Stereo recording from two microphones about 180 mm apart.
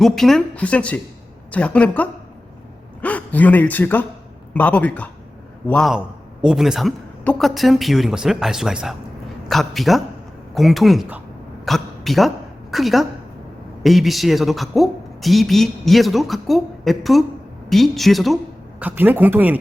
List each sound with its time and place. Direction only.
0.0 s a woman's voice: centre (ahead or behind)